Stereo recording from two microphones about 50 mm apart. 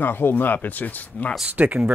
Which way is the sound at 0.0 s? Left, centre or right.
Left.